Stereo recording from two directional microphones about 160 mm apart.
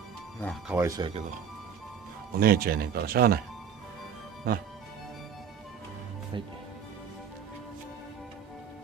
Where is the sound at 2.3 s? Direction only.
70° right (ahead or behind).